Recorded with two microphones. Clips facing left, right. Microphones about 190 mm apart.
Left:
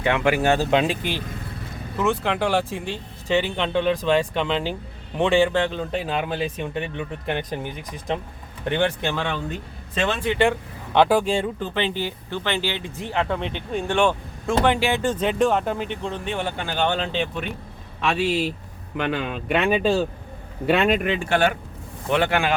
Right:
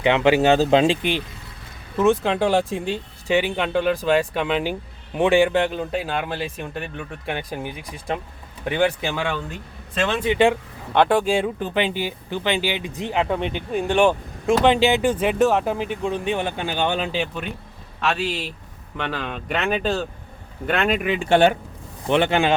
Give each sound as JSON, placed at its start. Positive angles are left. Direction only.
{"t": 0.0, "sound": "speech", "side_deg": -20}
{"t": 2.0, "sound": "speech", "side_deg": -15}
{"t": 10.9, "sound": "speech", "side_deg": 5}
{"t": 21.2, "sound": "speech", "side_deg": -25}